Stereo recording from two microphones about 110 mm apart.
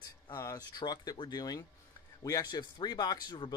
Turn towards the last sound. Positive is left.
turn(degrees=40)  # may be behind; listen again after turning